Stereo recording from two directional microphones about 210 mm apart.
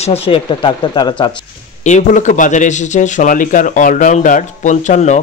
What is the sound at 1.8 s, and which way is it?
A man's voice, 35° left (ahead or behind).